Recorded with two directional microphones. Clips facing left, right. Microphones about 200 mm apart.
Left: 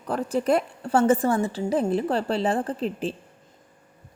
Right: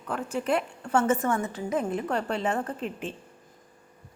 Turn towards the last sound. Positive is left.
turn(degrees=35)  # may be behind; listen again after turning